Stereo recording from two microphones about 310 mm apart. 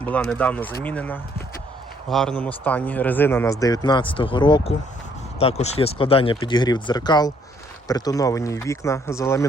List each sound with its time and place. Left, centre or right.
0.0 s speech: centre